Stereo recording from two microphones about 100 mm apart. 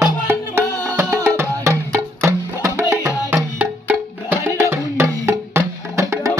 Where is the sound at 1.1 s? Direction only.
25° right (ahead or behind).